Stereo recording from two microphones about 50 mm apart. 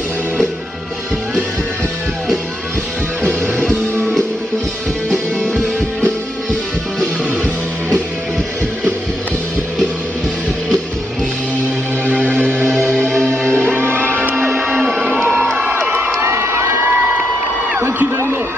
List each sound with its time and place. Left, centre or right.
5.1 s music: centre
12.4 s music: right
12.6 s music: centre
12.9 s music: centre
13.7 s music: right
15.0 s music: centre
16.2 s crowd: right